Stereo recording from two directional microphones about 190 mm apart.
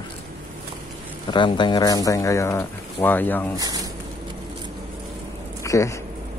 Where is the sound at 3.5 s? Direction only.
20° right (ahead or behind).